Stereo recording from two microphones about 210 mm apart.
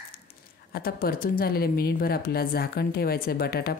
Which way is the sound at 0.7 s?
45° left (ahead or behind).